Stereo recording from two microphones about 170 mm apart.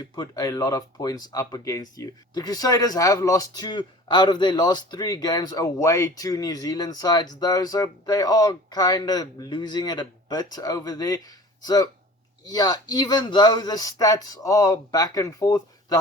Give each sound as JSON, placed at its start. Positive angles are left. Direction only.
{"t": 0.0, "sound": "speech", "side_deg": 25}